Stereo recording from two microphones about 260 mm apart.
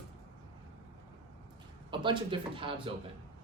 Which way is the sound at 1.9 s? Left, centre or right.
Centre.